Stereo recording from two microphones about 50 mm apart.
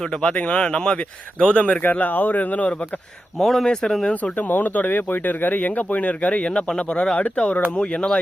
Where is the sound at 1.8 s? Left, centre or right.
Left.